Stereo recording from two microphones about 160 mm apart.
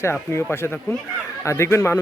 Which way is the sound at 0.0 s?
15° left (ahead or behind).